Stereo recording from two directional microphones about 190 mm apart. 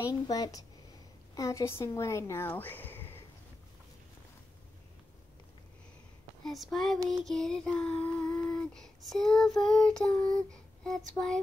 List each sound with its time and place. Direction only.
0.0 s speech: 20° left (ahead or behind)
6.4 s child singing: centre (ahead or behind)